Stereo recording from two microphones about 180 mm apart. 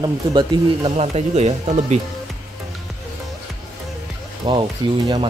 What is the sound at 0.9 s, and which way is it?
Speech, 35° right (ahead or behind).